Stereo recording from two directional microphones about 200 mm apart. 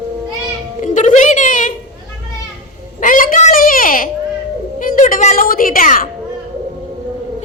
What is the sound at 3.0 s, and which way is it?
A woman's voice, 40° left (ahead or behind).